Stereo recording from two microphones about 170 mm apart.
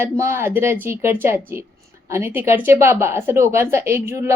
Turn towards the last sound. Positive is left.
turn(degrees=-15)  # may be behind; listen again after turning